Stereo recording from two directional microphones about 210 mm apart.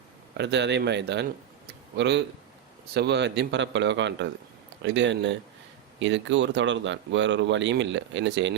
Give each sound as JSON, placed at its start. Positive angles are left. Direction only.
{"t": 0.3, "sound": "speech", "side_deg": -55}